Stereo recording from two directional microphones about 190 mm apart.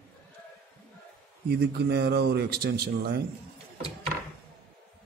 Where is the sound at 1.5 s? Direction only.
60° right (ahead or behind).